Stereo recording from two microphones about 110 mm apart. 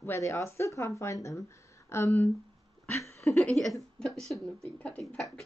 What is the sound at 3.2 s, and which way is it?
A woman's voice, 5° left (ahead or behind).